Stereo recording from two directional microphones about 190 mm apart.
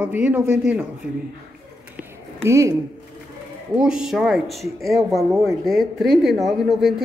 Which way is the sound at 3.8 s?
5° right (ahead or behind).